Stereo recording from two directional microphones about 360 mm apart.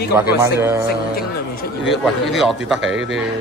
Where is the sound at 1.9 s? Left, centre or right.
Centre.